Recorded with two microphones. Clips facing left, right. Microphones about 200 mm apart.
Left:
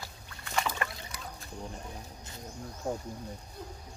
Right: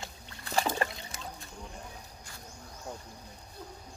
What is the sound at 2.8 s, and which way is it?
Speech, 50° left (ahead or behind).